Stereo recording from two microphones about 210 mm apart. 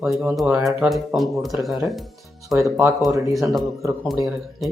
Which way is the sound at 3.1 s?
15° right (ahead or behind).